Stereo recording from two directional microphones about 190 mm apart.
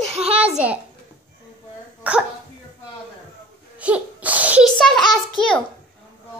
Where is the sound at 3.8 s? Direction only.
5° right (ahead or behind).